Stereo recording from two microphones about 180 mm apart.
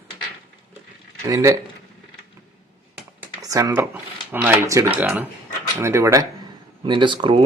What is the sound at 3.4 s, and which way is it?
Speech, 20° right (ahead or behind).